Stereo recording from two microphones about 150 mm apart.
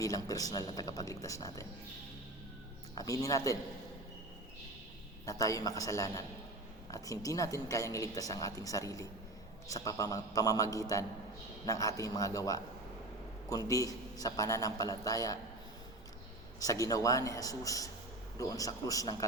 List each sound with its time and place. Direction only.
0.0 s a woman's voice: 25° left (ahead or behind)
2.9 s a woman's voice: 25° left (ahead or behind)
5.2 s a woman's voice: 25° left (ahead or behind)
16.6 s a woman's voice: 25° left (ahead or behind)